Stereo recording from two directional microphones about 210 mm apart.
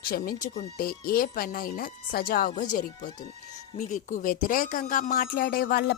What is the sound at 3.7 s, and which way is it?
A woman's voice, 35° left (ahead or behind).